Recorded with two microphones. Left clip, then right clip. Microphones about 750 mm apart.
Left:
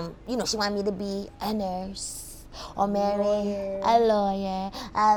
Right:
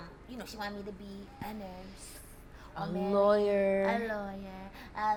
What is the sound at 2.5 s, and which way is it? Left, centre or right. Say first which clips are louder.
Speech: left 12 dB; left.